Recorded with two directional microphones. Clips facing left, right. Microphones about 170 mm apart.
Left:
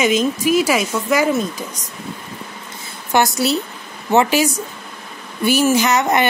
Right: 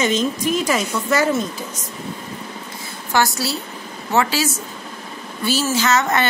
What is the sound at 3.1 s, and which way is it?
A woman's voice, 20° left (ahead or behind).